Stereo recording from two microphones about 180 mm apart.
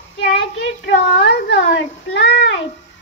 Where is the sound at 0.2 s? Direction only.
80° left.